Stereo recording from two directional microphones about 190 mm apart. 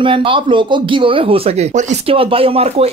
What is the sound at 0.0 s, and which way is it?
Speech, 25° right (ahead or behind).